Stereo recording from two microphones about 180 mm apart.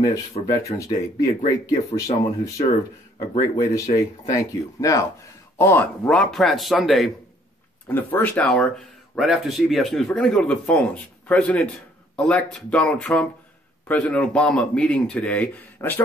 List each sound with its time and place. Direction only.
0.5 s speech: 20° left (ahead or behind); by 7.1 s centre (ahead or behind)
7.9 s a man's voice: 10° left (ahead or behind)